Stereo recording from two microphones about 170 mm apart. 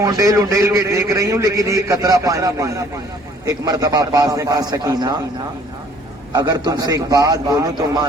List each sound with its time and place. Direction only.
0.0 s a man's voice: 20° right (ahead or behind)
6.3 s a man's voice: 25° right (ahead or behind)